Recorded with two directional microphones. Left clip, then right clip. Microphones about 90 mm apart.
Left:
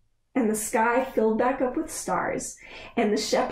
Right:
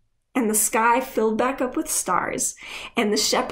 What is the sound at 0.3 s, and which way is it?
A woman's voice, 20° right (ahead or behind).